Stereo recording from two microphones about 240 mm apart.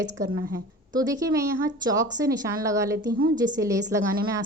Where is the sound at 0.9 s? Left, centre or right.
Centre.